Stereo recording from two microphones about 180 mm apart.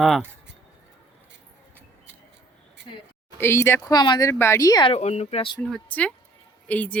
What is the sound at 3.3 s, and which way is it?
Speech, 15° left (ahead or behind).